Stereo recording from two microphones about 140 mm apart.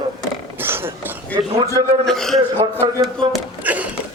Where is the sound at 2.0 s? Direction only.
Centre (ahead or behind).